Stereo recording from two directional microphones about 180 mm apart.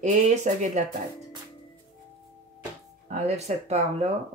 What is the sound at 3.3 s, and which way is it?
Speech, 35° right (ahead or behind).